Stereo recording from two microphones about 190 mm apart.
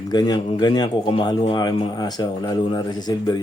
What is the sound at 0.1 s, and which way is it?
Speech, 20° left (ahead or behind).